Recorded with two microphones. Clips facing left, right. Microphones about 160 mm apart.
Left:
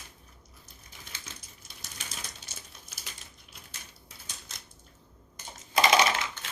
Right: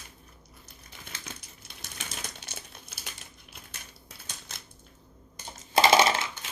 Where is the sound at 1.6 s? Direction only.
65° right (ahead or behind).